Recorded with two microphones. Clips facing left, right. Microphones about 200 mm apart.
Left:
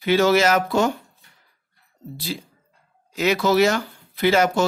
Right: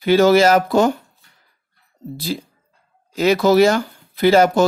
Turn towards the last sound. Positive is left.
turn(degrees=-35)  # may be behind; listen again after turning